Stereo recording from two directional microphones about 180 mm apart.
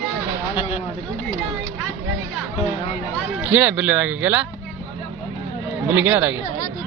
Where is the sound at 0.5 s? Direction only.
35° left (ahead or behind).